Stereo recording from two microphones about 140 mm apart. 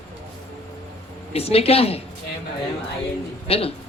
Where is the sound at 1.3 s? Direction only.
45° left (ahead or behind).